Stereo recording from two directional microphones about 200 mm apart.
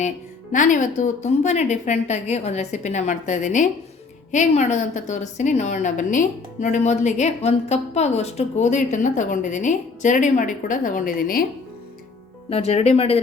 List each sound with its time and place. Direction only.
0.5 s a woman's voice: 40° left (ahead or behind)
12.5 s a woman's voice: 30° left (ahead or behind)